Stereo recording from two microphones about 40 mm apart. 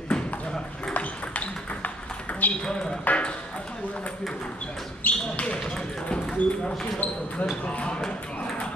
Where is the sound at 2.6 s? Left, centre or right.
Centre.